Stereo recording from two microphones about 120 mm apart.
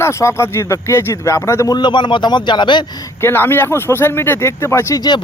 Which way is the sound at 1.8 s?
40° left (ahead or behind).